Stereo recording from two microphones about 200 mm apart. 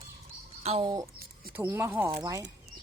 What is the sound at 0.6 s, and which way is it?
Speech, 30° right (ahead or behind).